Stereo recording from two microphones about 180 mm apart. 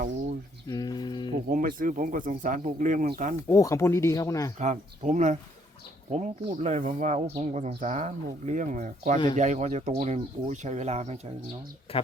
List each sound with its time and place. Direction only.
0.7 s a sound: 20° left (ahead or behind)
1.5 s speech: 50° right (ahead or behind)
3.5 s speech: 15° left (ahead or behind)
4.5 s speech: 45° right (ahead or behind)